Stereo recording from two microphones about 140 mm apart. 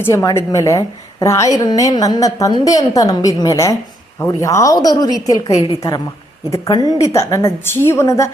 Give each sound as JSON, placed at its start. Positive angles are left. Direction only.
{"t": 0.0, "sound": "a woman's voice", "side_deg": 20}